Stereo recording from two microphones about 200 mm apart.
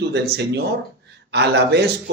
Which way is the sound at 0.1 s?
55° right (ahead or behind).